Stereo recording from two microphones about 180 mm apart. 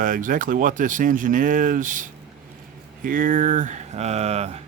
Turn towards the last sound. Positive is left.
turn(degrees=-35)  # may be behind; listen again after turning